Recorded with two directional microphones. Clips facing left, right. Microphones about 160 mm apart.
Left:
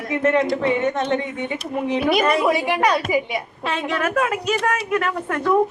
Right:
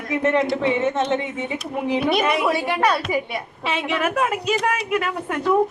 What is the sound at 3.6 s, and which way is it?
A woman's voice, 10° right (ahead or behind).